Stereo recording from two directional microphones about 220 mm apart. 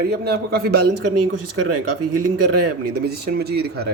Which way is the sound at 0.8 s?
90° right.